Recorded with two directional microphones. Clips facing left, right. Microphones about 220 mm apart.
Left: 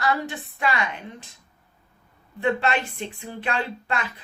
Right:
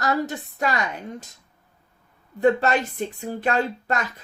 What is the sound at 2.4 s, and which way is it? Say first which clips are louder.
Speech: right 4 dB; 40° right (ahead or behind).